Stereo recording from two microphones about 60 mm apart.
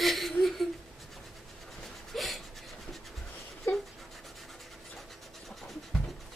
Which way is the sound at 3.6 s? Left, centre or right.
Left.